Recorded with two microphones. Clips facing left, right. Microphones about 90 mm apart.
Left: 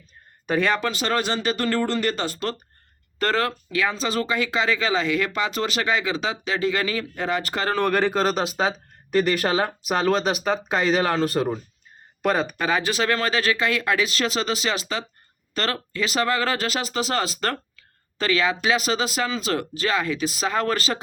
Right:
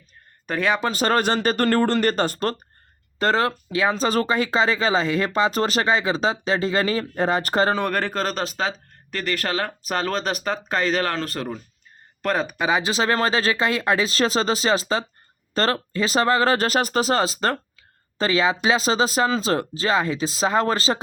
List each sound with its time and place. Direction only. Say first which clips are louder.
0.8 s speech: right 3 dB; 40° right (ahead or behind)
3.2 s speech: right 2 dB; 25° right (ahead or behind)
3.9 s speech: right 3 dB; 40° right (ahead or behind)
7.8 s speech: left 3 dB; centre (ahead or behind); by 11.6 s 15° left (ahead or behind)
12.2 s speech: left 1 dB; 5° left (ahead or behind)
12.5 s speech: right 1 dB; 15° right (ahead or behind)